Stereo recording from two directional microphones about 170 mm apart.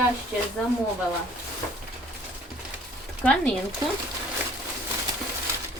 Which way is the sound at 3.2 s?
5° left (ahead or behind).